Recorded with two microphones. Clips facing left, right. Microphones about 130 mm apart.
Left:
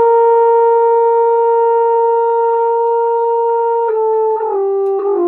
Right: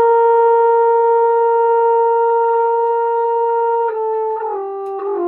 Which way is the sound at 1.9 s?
20° left (ahead or behind).